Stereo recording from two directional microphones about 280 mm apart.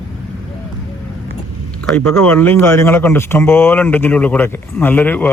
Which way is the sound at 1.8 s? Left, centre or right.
Centre.